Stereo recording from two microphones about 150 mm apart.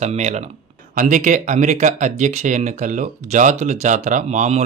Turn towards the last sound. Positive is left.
turn(degrees=-50)  # may be behind; listen again after turning